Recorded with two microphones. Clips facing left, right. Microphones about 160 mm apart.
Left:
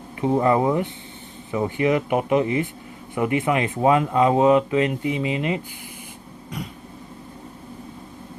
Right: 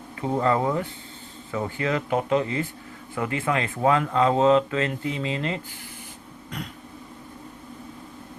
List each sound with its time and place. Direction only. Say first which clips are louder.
0.2 s speech: left 4 dB; 20° left (ahead or behind)